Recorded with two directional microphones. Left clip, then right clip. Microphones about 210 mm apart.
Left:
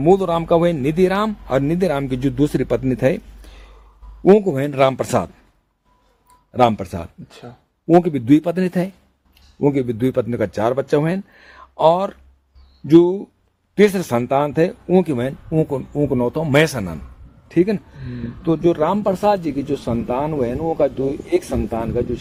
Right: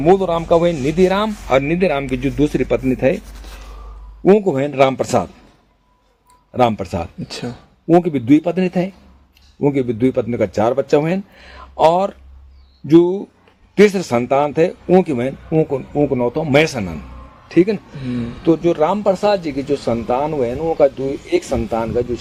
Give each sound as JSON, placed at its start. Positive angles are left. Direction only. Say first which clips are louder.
{"t": 0.0, "sound": "a man's voice", "louder": "right 1 dB", "side_deg": 40}
{"t": 4.2, "sound": "a man's voice", "louder": "even", "side_deg": 0}
{"t": 4.5, "sound": "speech", "louder": "right 2 dB", "side_deg": 50}
{"t": 6.5, "sound": "speech", "louder": "even", "side_deg": 0}
{"t": 7.3, "sound": "speech", "louder": "right 11 dB", "side_deg": -10}
{"t": 7.9, "sound": "speech", "louder": "right 1 dB", "side_deg": 0}
{"t": 8.2, "sound": "speech", "louder": "right 1 dB", "side_deg": 50}
{"t": 9.6, "sound": "speech", "louder": "right 1 dB", "side_deg": 0}
{"t": 10.0, "sound": "speech", "louder": "right 2 dB", "side_deg": 50}
{"t": 12.9, "sound": "speech", "louder": "even", "side_deg": 0}
{"t": 13.7, "sound": "speech", "louder": "right 3 dB", "side_deg": 40}